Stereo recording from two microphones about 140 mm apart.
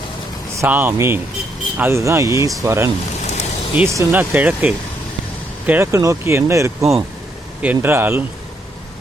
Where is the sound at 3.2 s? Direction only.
55° left (ahead or behind).